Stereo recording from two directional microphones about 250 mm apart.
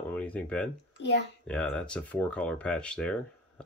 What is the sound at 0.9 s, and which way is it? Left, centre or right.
Speech, left.